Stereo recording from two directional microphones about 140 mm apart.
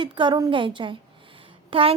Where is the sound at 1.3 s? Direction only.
40° right (ahead or behind).